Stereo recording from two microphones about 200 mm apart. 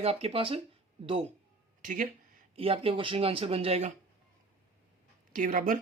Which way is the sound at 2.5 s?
30° right (ahead or behind).